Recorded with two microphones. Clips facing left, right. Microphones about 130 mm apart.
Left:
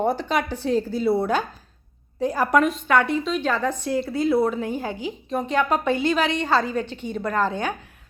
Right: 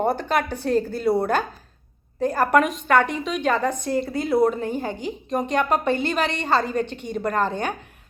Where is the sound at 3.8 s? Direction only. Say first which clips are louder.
Left 2 dB; centre (ahead or behind).